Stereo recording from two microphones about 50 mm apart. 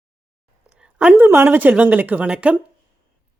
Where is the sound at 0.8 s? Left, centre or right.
Centre.